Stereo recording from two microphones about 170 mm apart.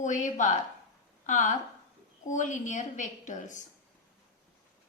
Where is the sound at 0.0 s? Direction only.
45° left (ahead or behind).